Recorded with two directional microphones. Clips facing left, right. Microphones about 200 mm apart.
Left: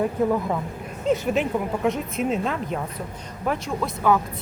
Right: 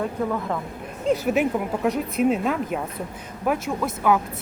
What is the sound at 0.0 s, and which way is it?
Speech, 15° left (ahead or behind).